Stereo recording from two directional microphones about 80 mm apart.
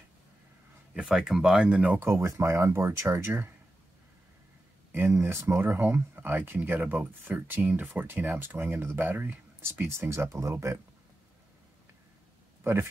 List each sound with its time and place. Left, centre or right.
0.9 s speech: centre
2.0 s speech: right
4.9 s speech: right